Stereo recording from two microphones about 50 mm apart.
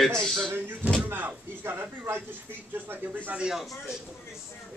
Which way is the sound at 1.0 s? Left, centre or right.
Right.